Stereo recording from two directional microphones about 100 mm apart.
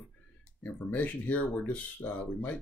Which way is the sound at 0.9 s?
15° left (ahead or behind).